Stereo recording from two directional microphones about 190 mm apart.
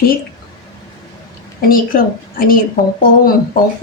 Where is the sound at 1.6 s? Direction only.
50° left (ahead or behind).